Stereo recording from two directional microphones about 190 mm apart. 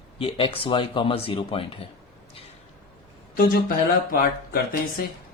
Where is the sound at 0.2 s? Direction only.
30° left (ahead or behind).